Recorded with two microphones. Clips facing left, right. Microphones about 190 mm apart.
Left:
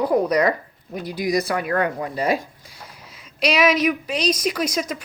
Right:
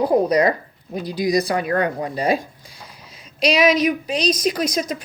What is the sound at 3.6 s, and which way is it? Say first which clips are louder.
Speech: right 1 dB; 15° right (ahead or behind).